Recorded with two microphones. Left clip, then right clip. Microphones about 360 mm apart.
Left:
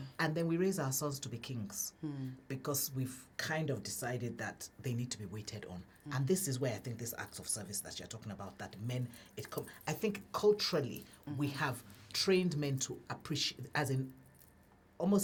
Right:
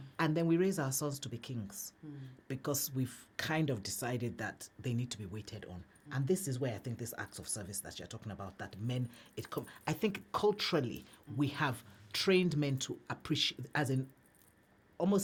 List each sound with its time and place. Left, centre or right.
0.2 s a woman's voice: right